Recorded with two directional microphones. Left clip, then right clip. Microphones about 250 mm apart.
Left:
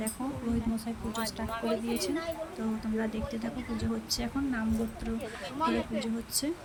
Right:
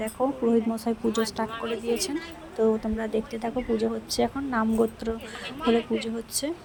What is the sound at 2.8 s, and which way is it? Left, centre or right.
Speech, centre.